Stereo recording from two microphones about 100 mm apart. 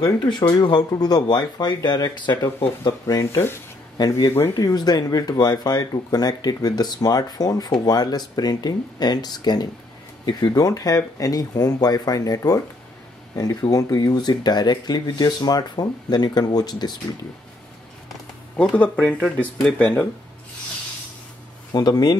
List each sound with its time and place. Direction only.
0.0 s speech: 50° left (ahead or behind)
2.8 s speech: 35° left (ahead or behind)
4.0 s speech: 40° left (ahead or behind)
18.8 s speech: 15° left (ahead or behind)
21.7 s speech: 40° left (ahead or behind)